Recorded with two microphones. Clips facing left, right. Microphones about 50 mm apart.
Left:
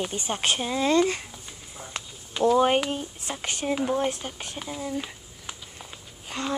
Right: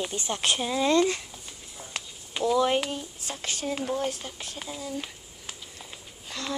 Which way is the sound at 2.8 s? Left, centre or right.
Left.